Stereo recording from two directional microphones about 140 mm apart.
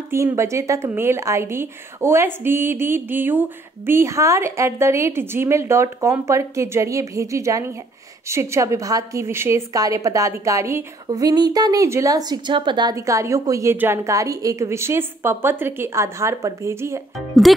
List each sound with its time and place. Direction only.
0.1 s a woman's voice: 20° right (ahead or behind)
12.9 s a woman's voice: 20° right (ahead or behind)
17.4 s a child's voice: centre (ahead or behind)